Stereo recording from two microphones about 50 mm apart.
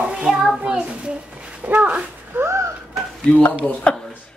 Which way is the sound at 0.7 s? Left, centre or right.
Right.